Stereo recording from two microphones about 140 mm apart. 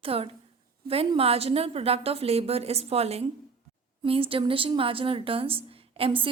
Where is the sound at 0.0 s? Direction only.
45° right (ahead or behind).